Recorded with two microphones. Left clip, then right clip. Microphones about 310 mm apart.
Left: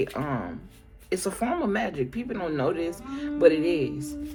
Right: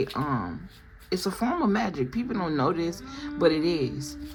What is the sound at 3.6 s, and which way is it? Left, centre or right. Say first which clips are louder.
Speech: left 1 dB; centre.